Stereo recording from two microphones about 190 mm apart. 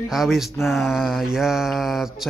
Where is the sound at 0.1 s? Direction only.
Centre (ahead or behind).